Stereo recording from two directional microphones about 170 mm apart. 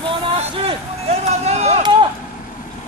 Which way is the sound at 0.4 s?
35° right (ahead or behind).